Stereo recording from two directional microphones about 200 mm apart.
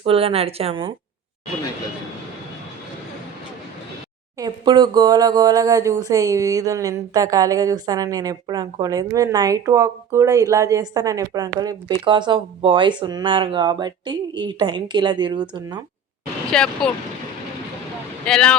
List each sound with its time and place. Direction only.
0.0 s speech: 30° right (ahead or behind)
4.4 s speech: 20° right (ahead or behind)
16.5 s speech: 5° left (ahead or behind)
18.3 s speech: 5° left (ahead or behind)